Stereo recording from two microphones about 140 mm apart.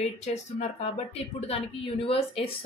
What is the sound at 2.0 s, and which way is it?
Speech, 40° left (ahead or behind).